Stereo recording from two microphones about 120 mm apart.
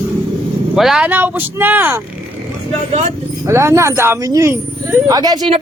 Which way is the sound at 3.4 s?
25° right (ahead or behind).